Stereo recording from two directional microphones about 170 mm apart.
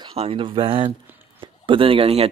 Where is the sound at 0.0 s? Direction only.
35° right (ahead or behind).